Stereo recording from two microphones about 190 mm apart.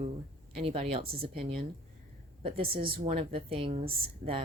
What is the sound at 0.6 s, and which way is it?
Speech, 30° right (ahead or behind).